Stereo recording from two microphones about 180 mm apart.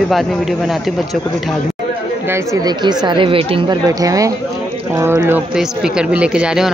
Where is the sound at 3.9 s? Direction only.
20° right (ahead or behind).